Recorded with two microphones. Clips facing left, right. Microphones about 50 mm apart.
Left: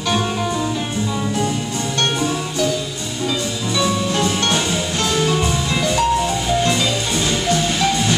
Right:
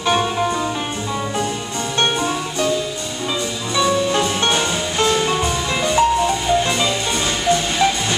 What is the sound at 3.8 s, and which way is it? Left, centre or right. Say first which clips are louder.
Music: right 2 dB; centre.